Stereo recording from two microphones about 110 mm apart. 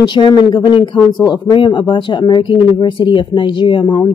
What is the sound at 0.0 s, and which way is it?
Speech, 45° left (ahead or behind).